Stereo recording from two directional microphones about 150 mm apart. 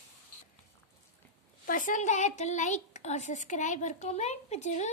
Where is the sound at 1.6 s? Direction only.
65° left (ahead or behind).